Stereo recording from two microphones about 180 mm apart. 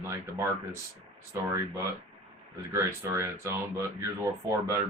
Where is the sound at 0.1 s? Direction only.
15° right (ahead or behind).